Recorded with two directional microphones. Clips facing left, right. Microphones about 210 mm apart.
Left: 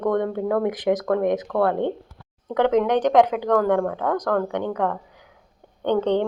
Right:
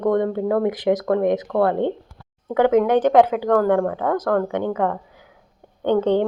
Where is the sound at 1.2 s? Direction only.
20° right (ahead or behind).